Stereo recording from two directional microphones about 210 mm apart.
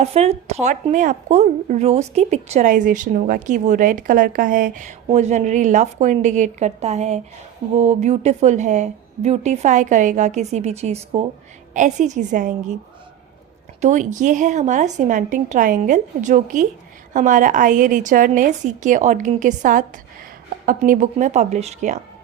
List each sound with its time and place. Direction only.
0.0 s speech: 30° right (ahead or behind)
13.8 s speech: 35° right (ahead or behind)